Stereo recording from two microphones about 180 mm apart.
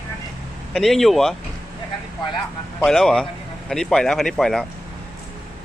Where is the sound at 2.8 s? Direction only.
5° left (ahead or behind).